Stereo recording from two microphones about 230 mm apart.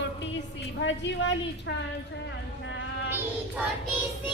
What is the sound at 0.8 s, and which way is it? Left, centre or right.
Speech, left.